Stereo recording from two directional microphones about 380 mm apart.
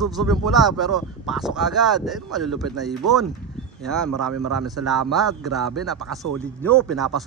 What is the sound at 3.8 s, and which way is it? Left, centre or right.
A man's voice, centre.